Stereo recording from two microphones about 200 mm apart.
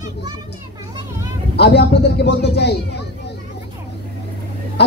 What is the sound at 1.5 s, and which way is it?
A man's voice, 55° left (ahead or behind).